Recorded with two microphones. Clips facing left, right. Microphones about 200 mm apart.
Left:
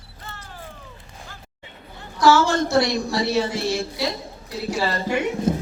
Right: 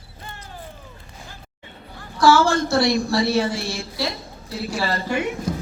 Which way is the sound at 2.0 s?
20° left (ahead or behind).